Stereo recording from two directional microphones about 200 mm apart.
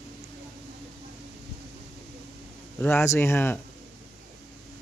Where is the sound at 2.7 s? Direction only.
10° left (ahead or behind).